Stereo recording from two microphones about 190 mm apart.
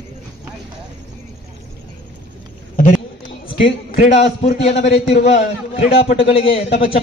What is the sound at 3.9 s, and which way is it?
A man's voice, 40° left (ahead or behind).